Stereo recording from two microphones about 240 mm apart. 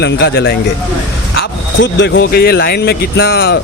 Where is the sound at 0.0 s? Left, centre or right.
Left.